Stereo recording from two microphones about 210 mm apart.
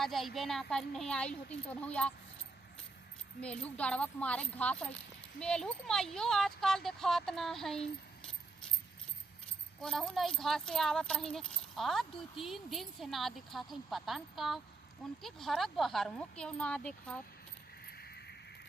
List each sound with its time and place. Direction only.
0.0 s speech: centre (ahead or behind)
3.4 s speech: 5° left (ahead or behind)
9.8 s speech: centre (ahead or behind)
17.8 s horse: 50° left (ahead or behind)